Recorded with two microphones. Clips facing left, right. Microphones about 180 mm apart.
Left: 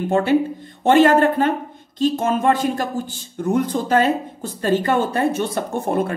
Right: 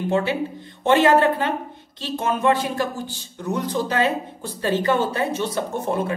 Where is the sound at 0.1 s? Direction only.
50° left (ahead or behind).